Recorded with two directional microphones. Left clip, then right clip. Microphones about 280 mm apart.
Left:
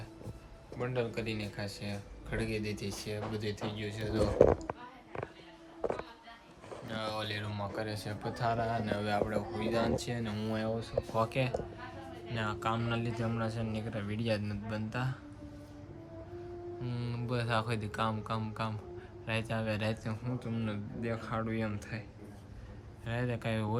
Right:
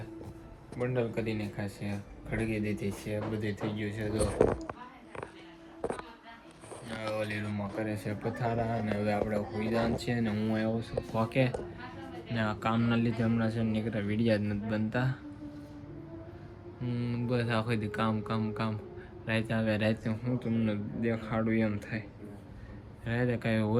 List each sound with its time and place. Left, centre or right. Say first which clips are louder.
0.8 s speech: right 3 dB; centre
6.8 s a sound: right 3 dB; centre
7.8 s speech: right 3 dB; centre
16.8 s speech: right 5 dB; centre
23.0 s speech: right 5 dB; centre